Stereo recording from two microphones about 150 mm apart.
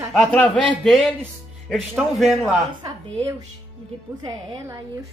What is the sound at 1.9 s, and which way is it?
Speech, centre (ahead or behind).